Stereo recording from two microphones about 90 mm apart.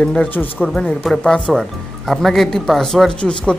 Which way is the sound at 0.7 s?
5° left (ahead or behind).